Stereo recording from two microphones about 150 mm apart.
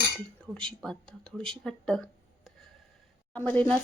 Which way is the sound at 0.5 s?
5° left (ahead or behind).